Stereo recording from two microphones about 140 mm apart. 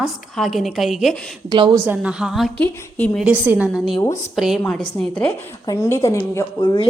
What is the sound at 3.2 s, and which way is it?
Speech, 10° right (ahead or behind).